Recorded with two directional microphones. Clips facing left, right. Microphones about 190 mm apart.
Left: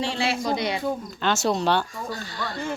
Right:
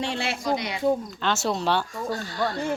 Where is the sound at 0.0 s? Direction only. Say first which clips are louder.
Left 2 dB; 55° right (ahead or behind).